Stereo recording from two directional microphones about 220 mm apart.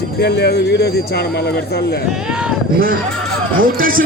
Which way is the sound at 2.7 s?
40° right (ahead or behind).